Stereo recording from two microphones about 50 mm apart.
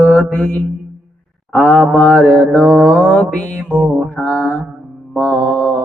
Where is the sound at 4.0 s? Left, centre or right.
Left.